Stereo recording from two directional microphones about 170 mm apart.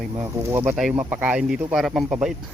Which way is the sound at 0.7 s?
5° right (ahead or behind).